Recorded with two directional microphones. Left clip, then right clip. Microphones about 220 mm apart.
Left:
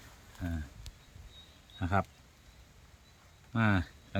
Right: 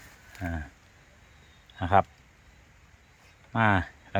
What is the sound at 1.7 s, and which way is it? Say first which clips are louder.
Speech: right 10 dB; 5° right (ahead or behind).